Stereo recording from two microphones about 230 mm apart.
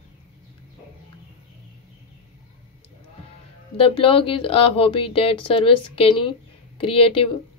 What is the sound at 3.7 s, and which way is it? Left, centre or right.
Speech, left.